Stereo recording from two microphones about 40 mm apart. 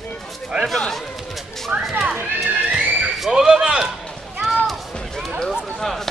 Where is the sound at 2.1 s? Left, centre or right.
Right.